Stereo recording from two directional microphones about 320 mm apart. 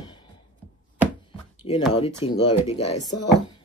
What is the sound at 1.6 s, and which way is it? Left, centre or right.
Speech, centre.